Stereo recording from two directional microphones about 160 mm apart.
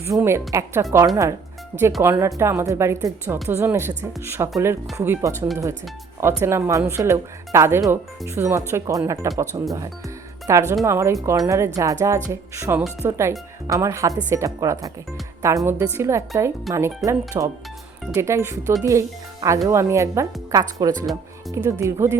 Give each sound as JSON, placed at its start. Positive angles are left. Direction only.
{"t": 0.0, "sound": "speech", "side_deg": -15}
{"t": 16.7, "sound": "speech", "side_deg": 0}
{"t": 17.1, "sound": "speech", "side_deg": -20}